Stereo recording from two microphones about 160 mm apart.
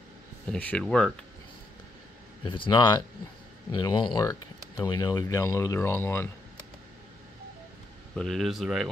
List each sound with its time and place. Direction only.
0.5 s speech: 10° left (ahead or behind)
2.4 s speech: 30° left (ahead or behind); by 6.3 s 15° left (ahead or behind)
8.2 s speech: centre (ahead or behind)